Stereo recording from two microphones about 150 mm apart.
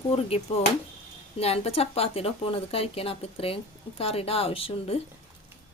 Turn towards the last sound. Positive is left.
turn(degrees=40)  # may be behind; listen again after turning